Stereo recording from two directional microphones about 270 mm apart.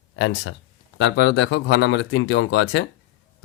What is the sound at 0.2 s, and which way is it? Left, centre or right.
Speech, left.